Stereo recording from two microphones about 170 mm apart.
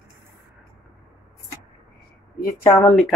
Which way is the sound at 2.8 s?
5° left (ahead or behind).